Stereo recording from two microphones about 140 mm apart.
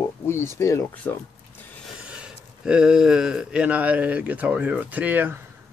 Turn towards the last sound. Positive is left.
turn(degrees=-15)  # may be behind; listen again after turning